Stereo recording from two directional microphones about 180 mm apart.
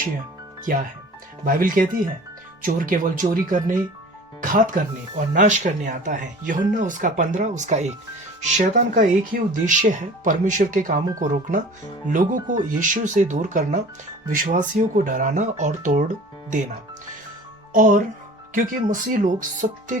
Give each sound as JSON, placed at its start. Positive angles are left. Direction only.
{"t": 0.7, "sound": "speech", "side_deg": -50}
{"t": 17.7, "sound": "speech", "side_deg": -50}